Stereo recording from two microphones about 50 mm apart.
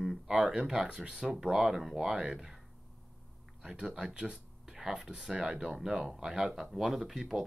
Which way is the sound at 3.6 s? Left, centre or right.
Centre.